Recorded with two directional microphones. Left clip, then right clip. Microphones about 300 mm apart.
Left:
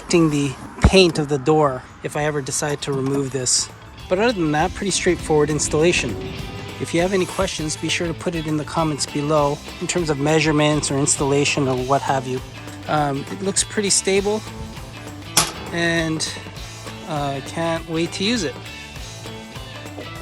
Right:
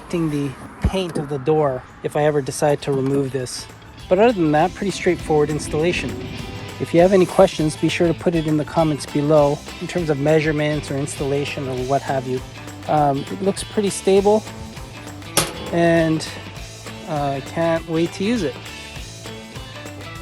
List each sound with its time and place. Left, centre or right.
0.1 s speech: centre
15.6 s speech: centre